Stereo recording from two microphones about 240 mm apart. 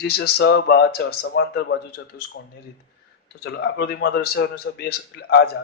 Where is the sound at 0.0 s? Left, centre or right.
Left.